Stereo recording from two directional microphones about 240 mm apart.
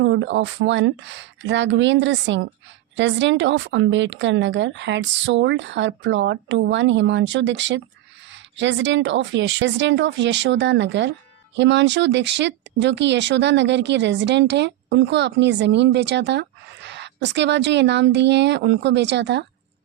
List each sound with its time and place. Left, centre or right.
0.0 s speech: right